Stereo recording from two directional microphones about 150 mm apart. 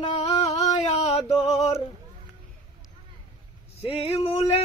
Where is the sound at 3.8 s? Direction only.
40° left (ahead or behind).